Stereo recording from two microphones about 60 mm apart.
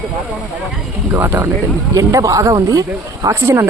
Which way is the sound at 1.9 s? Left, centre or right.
Right.